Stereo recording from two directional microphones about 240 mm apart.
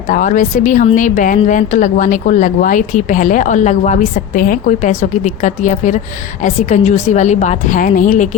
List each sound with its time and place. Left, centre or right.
0.1 s a woman's voice: left